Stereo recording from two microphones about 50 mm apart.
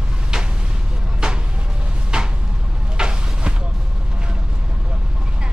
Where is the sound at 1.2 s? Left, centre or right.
Centre.